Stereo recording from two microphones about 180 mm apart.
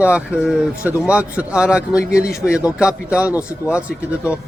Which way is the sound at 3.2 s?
15° left (ahead or behind).